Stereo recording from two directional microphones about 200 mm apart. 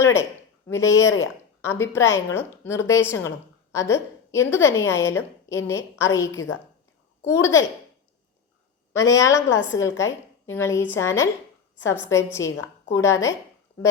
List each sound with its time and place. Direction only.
0.0 s a woman's voice: 10° left (ahead or behind)
1.0 s a woman's voice: 80° left
1.6 s a woman's voice: 10° left (ahead or behind)
8.9 s a woman's voice: 15° left (ahead or behind)
12.4 s a woman's voice: 75° left (ahead or behind)
12.9 s a woman's voice: 15° left (ahead or behind)